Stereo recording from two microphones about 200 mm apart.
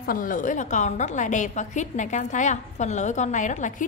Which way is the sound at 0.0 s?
45° left (ahead or behind).